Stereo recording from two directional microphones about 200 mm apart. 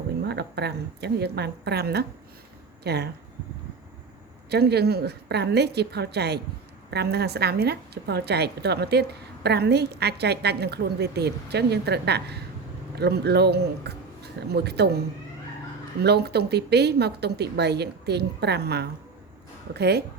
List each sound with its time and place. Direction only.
0.3 s a woman's voice: 55° right (ahead or behind)
4.4 s a woman's voice: 55° right (ahead or behind)
16.0 s a woman's voice: 55° right (ahead or behind)